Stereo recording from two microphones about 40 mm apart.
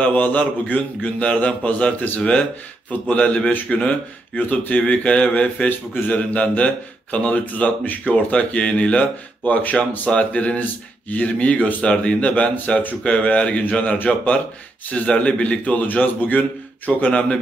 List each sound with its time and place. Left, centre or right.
0.0 s a man's voice: left
10.6 s speech: left
11.2 s speech: left
11.8 s a man's voice: left
15.6 s speech: left